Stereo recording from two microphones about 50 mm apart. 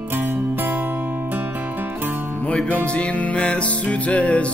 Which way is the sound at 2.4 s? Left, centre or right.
Left.